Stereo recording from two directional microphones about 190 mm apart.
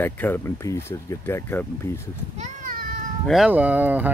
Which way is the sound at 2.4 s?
45° right (ahead or behind).